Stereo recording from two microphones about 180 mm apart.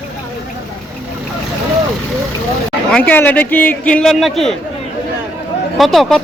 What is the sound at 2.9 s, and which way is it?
A man's voice, 5° left (ahead or behind).